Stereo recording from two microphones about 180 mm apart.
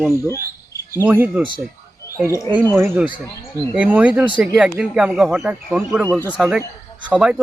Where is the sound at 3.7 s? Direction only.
5° right (ahead or behind).